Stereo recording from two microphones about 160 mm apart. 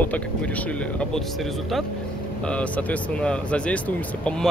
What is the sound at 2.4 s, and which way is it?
Speech, 10° left (ahead or behind).